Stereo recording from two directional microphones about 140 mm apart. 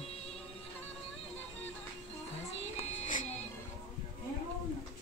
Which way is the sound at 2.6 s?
55° left (ahead or behind).